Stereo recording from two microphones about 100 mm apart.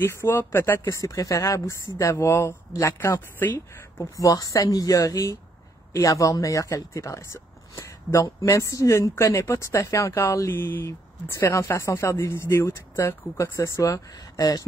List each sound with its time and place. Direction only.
0.0 s speech: 20° left (ahead or behind)
3.5 s speech: 35° left (ahead or behind)